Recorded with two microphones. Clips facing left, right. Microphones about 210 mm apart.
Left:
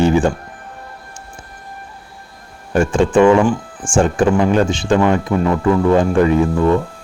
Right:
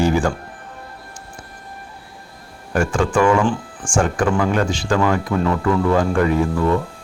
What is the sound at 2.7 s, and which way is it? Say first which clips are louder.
Speech: left 5 dB; 25° left (ahead or behind).